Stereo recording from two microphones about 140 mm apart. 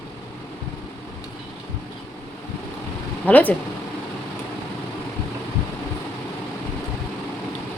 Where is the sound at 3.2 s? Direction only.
10° left (ahead or behind).